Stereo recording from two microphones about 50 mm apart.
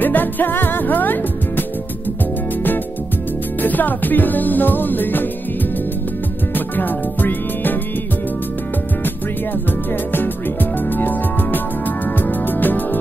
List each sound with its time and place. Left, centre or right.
0.0 s music: left
3.6 s music: left
6.5 s music: left
10.1 s music: left